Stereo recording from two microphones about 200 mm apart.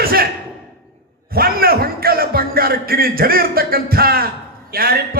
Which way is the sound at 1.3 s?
50° right (ahead or behind).